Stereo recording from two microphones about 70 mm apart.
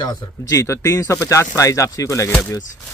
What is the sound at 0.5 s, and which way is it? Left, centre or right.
Speech, left.